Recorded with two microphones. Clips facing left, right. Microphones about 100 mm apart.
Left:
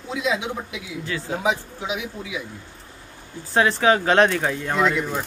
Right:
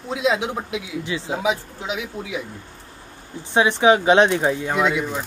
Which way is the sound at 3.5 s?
15° right (ahead or behind).